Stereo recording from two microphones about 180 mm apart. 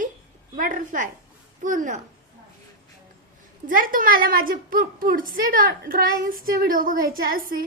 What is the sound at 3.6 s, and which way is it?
A woman's voice, 50° right (ahead or behind).